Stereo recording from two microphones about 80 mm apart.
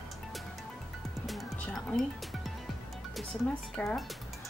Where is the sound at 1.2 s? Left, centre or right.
Centre.